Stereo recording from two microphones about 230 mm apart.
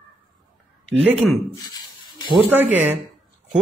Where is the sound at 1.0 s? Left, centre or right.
Centre.